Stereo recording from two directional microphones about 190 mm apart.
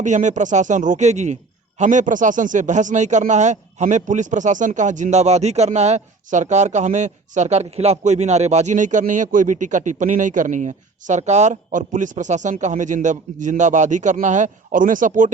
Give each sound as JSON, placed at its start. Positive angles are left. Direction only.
{"t": 0.0, "sound": "a man's voice", "side_deg": -40}